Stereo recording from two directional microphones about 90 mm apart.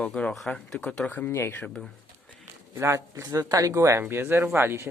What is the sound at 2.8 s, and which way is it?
Speech, 30° right (ahead or behind).